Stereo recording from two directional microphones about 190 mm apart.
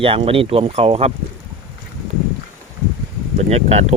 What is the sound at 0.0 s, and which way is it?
Speech, 30° right (ahead or behind).